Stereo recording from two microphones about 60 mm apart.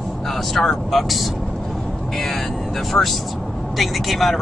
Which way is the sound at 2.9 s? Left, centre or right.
Centre.